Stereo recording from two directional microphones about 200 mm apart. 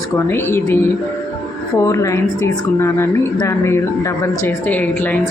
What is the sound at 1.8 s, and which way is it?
A woman's voice, 15° left (ahead or behind).